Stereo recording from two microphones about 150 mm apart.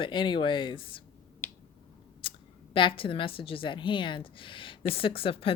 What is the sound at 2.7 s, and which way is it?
Speech, 35° left (ahead or behind).